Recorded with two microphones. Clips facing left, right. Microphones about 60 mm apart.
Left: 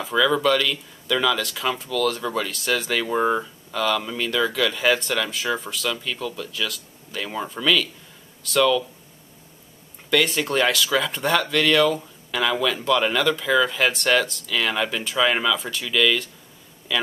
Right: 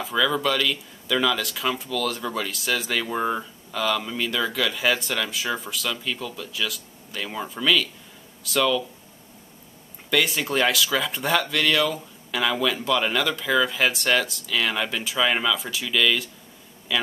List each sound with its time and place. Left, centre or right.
0.0 s speech: centre
10.0 s speech: centre